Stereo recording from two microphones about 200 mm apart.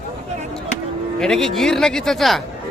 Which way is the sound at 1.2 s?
Centre (ahead or behind).